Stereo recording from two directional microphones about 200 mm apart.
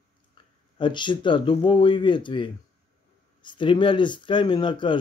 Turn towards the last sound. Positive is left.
turn(degrees=25)  # may be behind; listen again after turning